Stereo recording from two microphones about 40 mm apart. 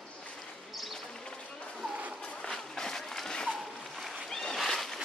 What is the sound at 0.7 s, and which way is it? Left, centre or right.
Bird, centre.